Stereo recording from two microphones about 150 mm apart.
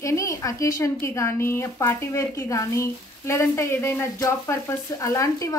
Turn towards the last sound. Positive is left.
turn(degrees=20)  # may be behind; listen again after turning